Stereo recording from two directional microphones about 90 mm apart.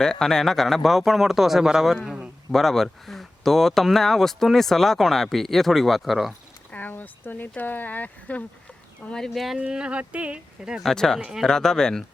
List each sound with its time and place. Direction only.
0.0 s speech: 5° left (ahead or behind)
2.0 s a sound: 15° right (ahead or behind)
2.5 s speech: 5° left (ahead or behind)
6.7 s speech: 20° left (ahead or behind)
9.0 s speech: 5° left (ahead or behind)
9.6 s speech: 10° right (ahead or behind)
10.8 s speech: 5° left (ahead or behind)
11.2 s speech: 5° right (ahead or behind)
11.4 s speech: 5° left (ahead or behind)